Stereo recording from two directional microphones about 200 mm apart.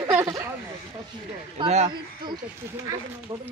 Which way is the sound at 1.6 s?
30° right (ahead or behind).